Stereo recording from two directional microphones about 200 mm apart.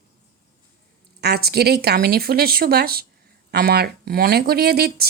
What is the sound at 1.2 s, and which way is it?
A woman's voice, 55° right (ahead or behind).